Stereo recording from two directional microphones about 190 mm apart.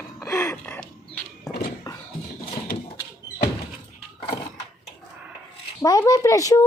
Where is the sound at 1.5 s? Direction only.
55° left (ahead or behind).